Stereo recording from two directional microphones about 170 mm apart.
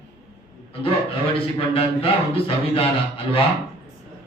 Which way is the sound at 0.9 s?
30° left (ahead or behind).